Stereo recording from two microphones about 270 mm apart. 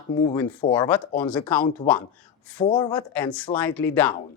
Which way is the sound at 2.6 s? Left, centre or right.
Centre.